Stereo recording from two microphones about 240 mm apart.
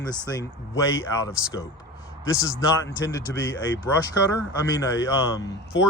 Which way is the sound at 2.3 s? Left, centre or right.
Centre.